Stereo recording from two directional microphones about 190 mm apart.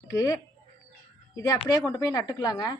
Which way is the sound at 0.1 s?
15° left (ahead or behind).